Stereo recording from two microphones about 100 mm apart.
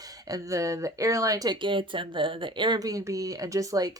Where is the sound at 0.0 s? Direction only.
35° right (ahead or behind).